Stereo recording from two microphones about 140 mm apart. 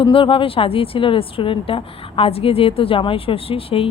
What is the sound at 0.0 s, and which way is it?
A woman's voice, 40° left (ahead or behind).